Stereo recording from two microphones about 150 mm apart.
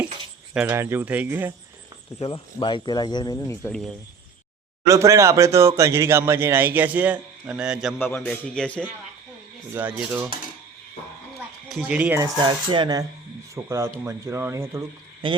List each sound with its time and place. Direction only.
0.5 s speech: 10° right (ahead or behind)
2.1 s speech: 35° left (ahead or behind); by 3.7 s 20° left (ahead or behind)
3.7 s speech: 5° left (ahead or behind)
4.9 s speech: 20° right (ahead or behind); by 7.9 s 5° right (ahead or behind)
7.9 s a man's voice: 10° left (ahead or behind)
9.7 s speech: 15° right (ahead or behind)
11.8 s speech: 10° right (ahead or behind)
12.2 s speech: 30° right (ahead or behind)
13.7 s speech: 20° right (ahead or behind)
15.2 s speech: 35° right (ahead or behind)